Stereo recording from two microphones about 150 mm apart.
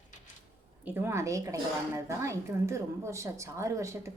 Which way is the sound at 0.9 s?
15° right (ahead or behind).